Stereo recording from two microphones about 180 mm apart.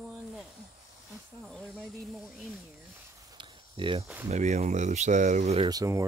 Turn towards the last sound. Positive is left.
turn(degrees=-20)  # may be behind; listen again after turning